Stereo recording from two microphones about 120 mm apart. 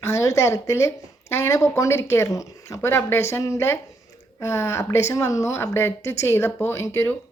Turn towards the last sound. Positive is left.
turn(degrees=20)  # may be behind; listen again after turning